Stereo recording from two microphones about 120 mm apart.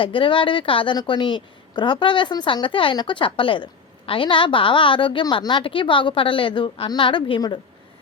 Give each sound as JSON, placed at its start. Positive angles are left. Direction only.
{"t": 0.0, "sound": "a woman's voice", "side_deg": 45}